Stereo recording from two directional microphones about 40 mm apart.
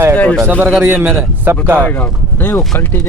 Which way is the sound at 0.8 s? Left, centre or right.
Right.